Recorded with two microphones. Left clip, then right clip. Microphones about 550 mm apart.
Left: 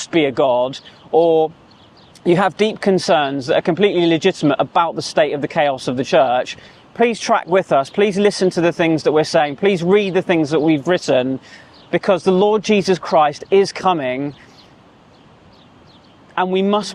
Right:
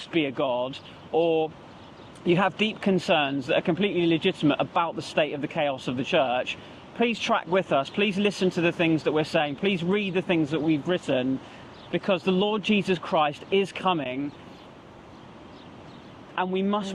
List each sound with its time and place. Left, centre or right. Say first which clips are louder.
0.0 s speech: left 11 dB; left
16.3 s speech: left 10 dB; left